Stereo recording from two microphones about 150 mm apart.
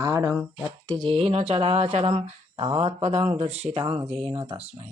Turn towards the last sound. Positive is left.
turn(degrees=-40)  # may be behind; listen again after turning